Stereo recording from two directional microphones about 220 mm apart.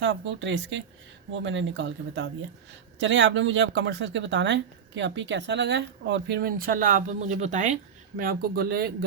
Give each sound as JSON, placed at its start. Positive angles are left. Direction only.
{"t": 0.0, "sound": "speech", "side_deg": -55}